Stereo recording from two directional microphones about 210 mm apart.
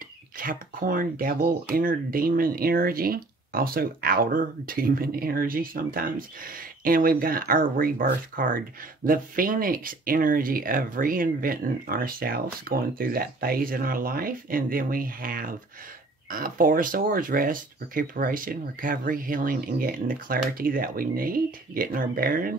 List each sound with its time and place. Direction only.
0.4 s speech: 40° right (ahead or behind)